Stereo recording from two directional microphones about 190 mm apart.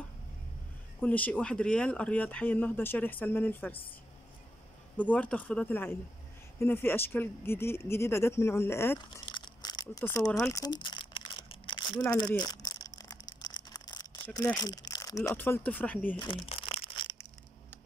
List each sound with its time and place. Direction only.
1.0 s speech: 10° left (ahead or behind)
4.9 s speech: 10° left (ahead or behind)
9.2 s crumpling: 25° left (ahead or behind)
14.3 s speech: 15° left (ahead or behind)
16.2 s crumpling: 25° left (ahead or behind)